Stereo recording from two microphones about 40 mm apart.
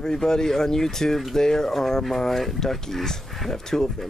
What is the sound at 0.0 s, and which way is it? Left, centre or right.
Speech, centre.